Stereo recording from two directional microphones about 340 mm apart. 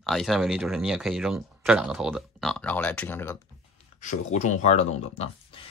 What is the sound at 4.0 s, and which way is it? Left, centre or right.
Speech, left.